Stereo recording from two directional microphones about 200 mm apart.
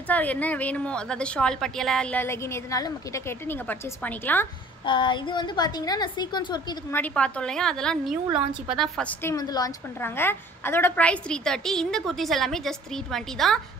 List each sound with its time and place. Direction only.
0.1 s a woman's voice: 10° left (ahead or behind)
4.8 s a woman's voice: 25° left (ahead or behind)
7.0 s a woman's voice: 5° left (ahead or behind)
9.2 s a woman's voice: 20° left (ahead or behind); by 13.6 s centre (ahead or behind)